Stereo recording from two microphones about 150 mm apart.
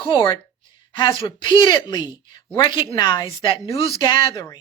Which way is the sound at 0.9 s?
30° left (ahead or behind).